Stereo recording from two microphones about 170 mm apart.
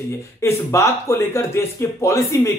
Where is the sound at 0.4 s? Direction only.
15° left (ahead or behind).